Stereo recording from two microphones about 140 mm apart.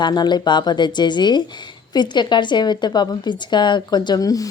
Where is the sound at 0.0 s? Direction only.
30° left (ahead or behind).